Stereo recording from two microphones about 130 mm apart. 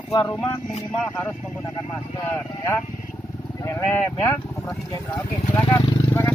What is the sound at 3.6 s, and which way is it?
A man's voice, 20° left (ahead or behind).